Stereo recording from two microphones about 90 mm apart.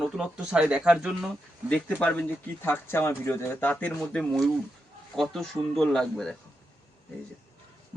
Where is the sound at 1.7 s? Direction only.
15° left (ahead or behind).